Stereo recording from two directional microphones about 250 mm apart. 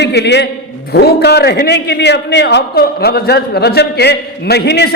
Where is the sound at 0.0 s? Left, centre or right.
Left.